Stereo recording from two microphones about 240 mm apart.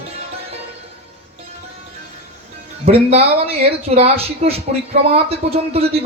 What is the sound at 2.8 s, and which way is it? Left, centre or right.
Speech, right.